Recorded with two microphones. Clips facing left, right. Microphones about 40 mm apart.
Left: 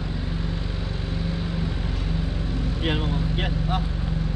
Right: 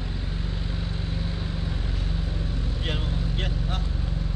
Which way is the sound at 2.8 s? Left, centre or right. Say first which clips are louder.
Left 6 dB; centre.